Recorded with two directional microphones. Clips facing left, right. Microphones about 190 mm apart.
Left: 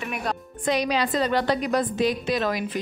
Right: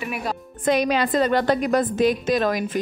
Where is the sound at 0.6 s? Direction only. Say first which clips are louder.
Right 4 dB; 50° right (ahead or behind).